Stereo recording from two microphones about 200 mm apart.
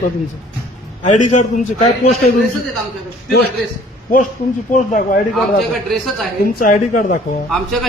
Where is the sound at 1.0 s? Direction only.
35° left (ahead or behind).